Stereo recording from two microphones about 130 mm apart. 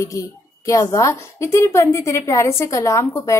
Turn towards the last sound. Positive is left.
turn(degrees=25)  # may be behind; listen again after turning